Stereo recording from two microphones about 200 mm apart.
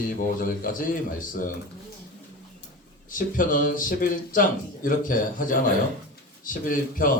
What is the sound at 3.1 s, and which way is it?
Speech, 40° left (ahead or behind).